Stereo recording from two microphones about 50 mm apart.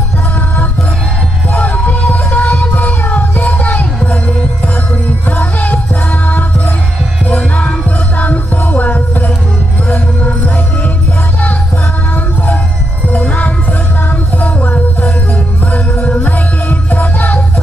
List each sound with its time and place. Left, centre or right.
1.5 s music: left
5.3 s music: left
7.2 s music: left
13.1 s music: left